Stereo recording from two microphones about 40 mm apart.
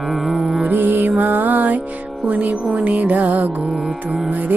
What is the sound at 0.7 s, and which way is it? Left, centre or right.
Music, right.